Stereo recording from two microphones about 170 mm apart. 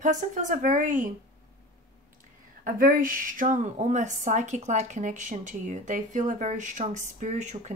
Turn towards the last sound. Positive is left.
turn(degrees=-45)  # may be behind; listen again after turning